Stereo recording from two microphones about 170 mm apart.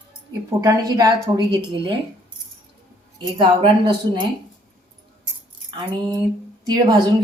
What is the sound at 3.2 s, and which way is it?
A woman's voice, 30° right (ahead or behind).